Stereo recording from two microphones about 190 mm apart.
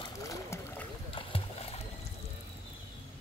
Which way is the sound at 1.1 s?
30° left (ahead or behind).